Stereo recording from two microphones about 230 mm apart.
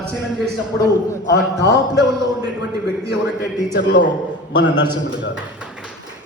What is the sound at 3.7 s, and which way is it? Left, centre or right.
A man's voice, left.